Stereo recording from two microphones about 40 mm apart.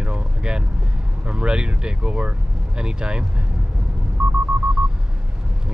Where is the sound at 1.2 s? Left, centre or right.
Right.